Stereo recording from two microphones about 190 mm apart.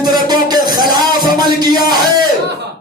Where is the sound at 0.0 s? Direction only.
20° right (ahead or behind).